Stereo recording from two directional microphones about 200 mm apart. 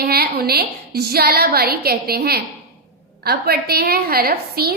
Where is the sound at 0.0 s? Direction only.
50° right (ahead or behind).